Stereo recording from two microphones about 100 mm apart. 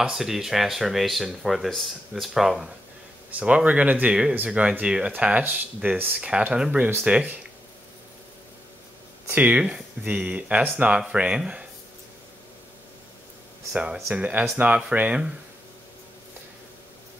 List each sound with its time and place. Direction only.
0.0 s speech: 5° right (ahead or behind)
3.3 s speech: 15° right (ahead or behind)
9.3 s speech: 15° right (ahead or behind)
14.0 s speech: 10° right (ahead or behind)